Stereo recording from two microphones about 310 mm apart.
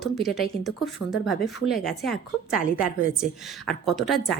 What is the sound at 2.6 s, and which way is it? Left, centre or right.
Speech, left.